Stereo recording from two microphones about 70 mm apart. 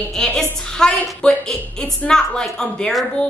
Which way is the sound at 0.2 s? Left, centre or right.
Centre.